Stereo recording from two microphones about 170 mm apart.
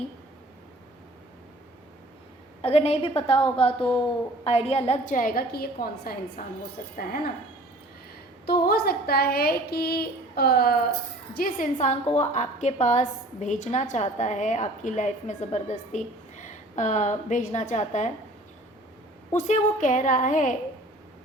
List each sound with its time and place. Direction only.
2.6 s a woman's voice: 35° left (ahead or behind); by 6.5 s 55° left (ahead or behind)
8.4 s a woman's voice: 65° left (ahead or behind); by 18.1 s 45° left (ahead or behind)
19.4 s a woman's voice: 45° left (ahead or behind)